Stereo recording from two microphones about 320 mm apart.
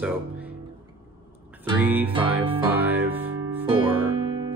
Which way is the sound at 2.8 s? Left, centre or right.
Centre.